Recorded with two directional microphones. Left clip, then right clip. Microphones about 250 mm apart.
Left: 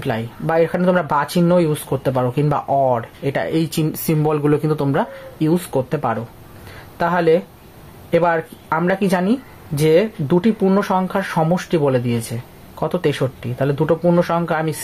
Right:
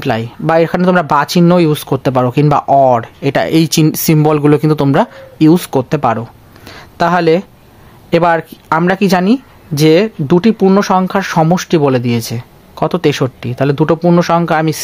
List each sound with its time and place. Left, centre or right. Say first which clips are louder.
0.0 s speech: right 7 dB; right
6.7 s a sound: right 7 dB; right
8.1 s speech: right 6 dB; right